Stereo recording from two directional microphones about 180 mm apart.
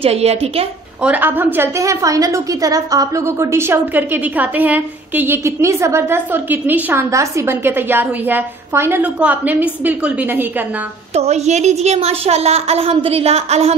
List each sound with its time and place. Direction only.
0.0 s a woman's voice: 35° right (ahead or behind)
1.0 s a woman's voice: 10° right (ahead or behind)
11.1 s a woman's voice: 35° right (ahead or behind)